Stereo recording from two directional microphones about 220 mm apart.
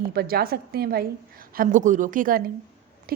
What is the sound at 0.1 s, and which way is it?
A woman's voice, 45° right (ahead or behind).